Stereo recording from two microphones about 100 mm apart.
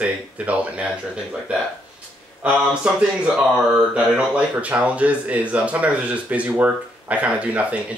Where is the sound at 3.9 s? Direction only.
15° right (ahead or behind).